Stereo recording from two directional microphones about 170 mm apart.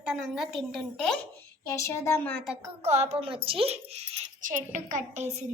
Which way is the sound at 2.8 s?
40° right (ahead or behind).